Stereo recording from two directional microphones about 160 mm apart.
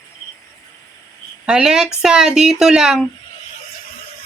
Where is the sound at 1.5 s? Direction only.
5° right (ahead or behind).